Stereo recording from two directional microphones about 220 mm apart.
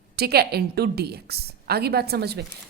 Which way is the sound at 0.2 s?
45° right (ahead or behind).